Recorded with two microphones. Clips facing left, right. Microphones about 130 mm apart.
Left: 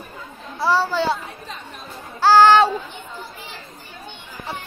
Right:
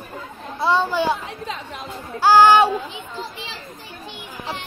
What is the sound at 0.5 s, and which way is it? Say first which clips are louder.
Speech: even; 20° right (ahead or behind).